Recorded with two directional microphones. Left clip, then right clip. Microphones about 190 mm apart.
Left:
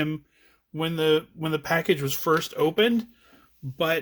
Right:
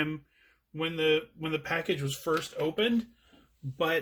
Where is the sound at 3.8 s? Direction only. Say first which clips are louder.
Left 4 dB; 35° left (ahead or behind).